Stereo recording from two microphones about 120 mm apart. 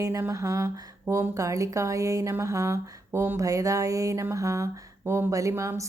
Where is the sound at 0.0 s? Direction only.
25° right (ahead or behind).